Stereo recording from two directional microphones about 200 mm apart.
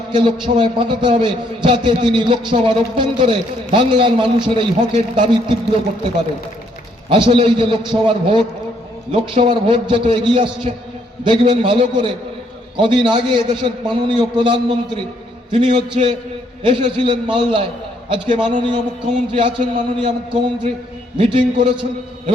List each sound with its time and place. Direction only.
0.1 s a man's voice: 25° right (ahead or behind)
7.1 s a man's voice: 25° right (ahead or behind)